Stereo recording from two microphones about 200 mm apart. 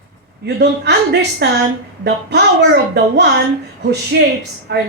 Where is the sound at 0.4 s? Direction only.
55° right (ahead or behind).